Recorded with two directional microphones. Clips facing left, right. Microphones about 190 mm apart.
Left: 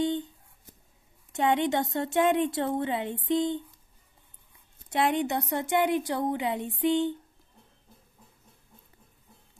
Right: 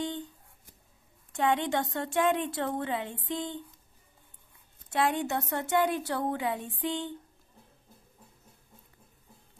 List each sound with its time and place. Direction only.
1.3 s a woman's voice: 20° left (ahead or behind)
4.8 s a woman's voice: 20° left (ahead or behind)